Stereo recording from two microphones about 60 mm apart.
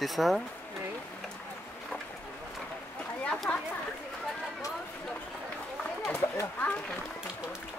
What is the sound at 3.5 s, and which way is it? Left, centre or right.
Chatter, centre.